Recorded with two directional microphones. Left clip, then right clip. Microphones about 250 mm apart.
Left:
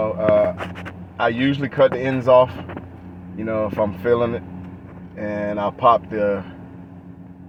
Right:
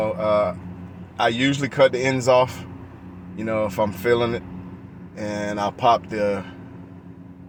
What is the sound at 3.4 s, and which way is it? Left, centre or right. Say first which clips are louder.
Speech: left 1 dB; centre.